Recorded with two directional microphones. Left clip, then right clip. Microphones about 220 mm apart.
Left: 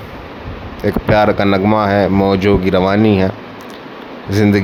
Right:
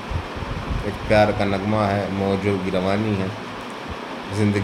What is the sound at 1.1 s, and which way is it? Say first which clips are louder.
Speech: left 5 dB; 45° left (ahead or behind).